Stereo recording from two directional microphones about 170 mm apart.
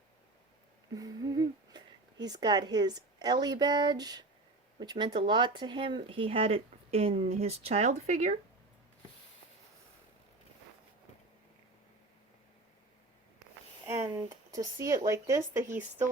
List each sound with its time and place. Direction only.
0.9 s a woman's voice: 20° right (ahead or behind); by 8.4 s 40° right (ahead or behind)
13.8 s speech: 15° right (ahead or behind)